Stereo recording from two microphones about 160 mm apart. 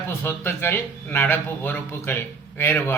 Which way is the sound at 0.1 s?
15° left (ahead or behind).